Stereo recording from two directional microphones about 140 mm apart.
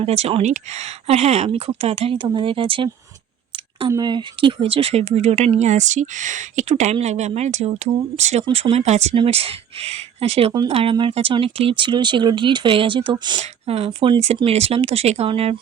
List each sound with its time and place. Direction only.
0.0 s speech: 45° right (ahead or behind)
3.8 s speech: 30° right (ahead or behind); by 8.4 s 50° right (ahead or behind)
8.4 s speech: 35° right (ahead or behind)
8.7 s speech: 50° right (ahead or behind); by 13.4 s 35° right (ahead or behind)
13.4 s speech: 45° right (ahead or behind)